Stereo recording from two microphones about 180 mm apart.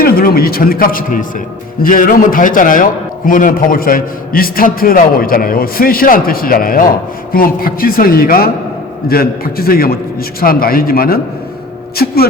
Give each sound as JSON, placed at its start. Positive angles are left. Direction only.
{"t": 0.0, "sound": "a man's voice", "side_deg": 55}